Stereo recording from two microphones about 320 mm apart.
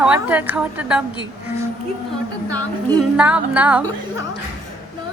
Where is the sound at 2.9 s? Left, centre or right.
Centre.